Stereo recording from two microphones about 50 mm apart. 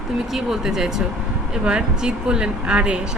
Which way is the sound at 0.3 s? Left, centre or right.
Centre.